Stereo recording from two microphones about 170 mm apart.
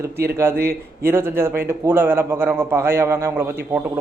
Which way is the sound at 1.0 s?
15° right (ahead or behind).